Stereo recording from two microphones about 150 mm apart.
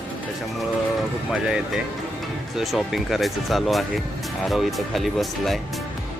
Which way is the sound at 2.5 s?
Centre (ahead or behind).